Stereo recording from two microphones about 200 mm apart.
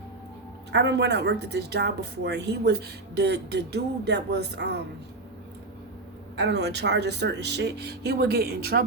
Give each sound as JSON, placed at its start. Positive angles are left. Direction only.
{"t": 0.7, "sound": "a woman's voice", "side_deg": -60}
{"t": 6.3, "sound": "a woman's voice", "side_deg": -60}